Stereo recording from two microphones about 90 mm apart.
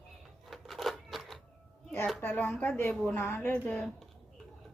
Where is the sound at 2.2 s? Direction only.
25° left (ahead or behind).